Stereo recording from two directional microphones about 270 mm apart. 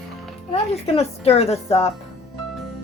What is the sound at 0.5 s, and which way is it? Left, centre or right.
Speech, left.